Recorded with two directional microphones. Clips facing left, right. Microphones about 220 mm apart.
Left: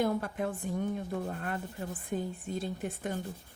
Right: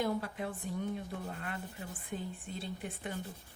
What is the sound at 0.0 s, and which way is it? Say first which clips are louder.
A woman's voice: left 4 dB; 50° left (ahead or behind).